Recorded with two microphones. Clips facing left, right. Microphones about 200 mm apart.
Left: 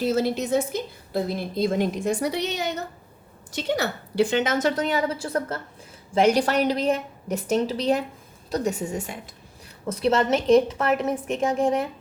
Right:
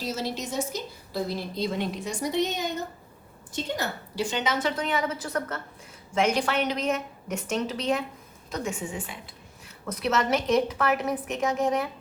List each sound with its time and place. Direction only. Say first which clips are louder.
0.0 s a woman's voice: left 8 dB; 55° left (ahead or behind); by 9.1 s 40° left (ahead or behind)
9.8 s a woman's voice: left 5 dB; 30° left (ahead or behind)